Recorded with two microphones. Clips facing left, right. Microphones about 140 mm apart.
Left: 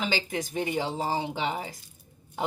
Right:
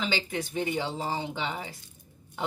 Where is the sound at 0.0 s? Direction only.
40° left (ahead or behind).